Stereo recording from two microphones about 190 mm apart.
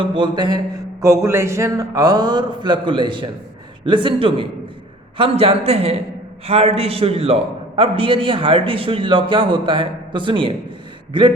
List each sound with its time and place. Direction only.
0.0 s a man's voice: 25° right (ahead or behind)